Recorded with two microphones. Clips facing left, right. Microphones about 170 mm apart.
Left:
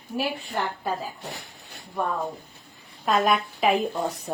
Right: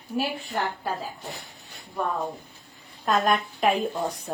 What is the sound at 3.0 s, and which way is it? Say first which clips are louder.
Speech: left 1 dB; centre (ahead or behind).